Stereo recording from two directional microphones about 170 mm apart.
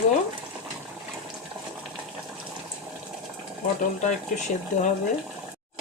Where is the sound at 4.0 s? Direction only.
45° left (ahead or behind).